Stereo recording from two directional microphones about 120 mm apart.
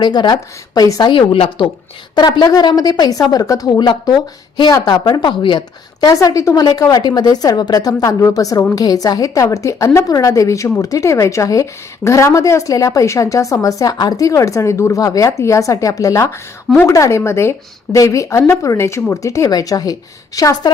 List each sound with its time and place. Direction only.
0.0 s a woman's voice: 40° left (ahead or behind)
2.1 s a woman's voice: 35° left (ahead or behind)